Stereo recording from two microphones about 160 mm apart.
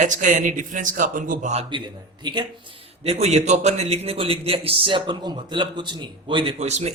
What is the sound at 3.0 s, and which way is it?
A man's voice, 40° right (ahead or behind).